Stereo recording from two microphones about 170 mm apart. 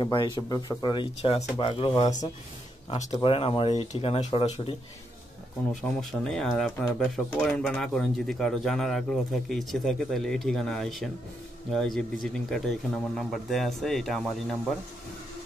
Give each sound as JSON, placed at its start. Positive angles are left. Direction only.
{"t": 0.0, "sound": "speech", "side_deg": 25}
{"t": 3.1, "sound": "speech", "side_deg": 30}
{"t": 5.8, "sound": "a man's voice", "side_deg": 0}